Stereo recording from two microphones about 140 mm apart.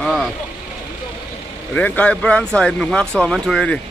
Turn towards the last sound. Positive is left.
turn(degrees=5)  # may be behind; listen again after turning